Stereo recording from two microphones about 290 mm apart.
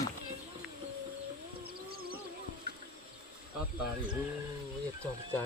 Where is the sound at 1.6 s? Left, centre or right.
Right.